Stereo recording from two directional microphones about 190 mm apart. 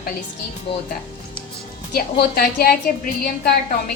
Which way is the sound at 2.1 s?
50° left (ahead or behind).